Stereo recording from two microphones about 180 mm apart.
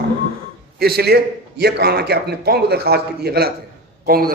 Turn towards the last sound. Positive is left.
turn(degrees=-55)  # may be behind; listen again after turning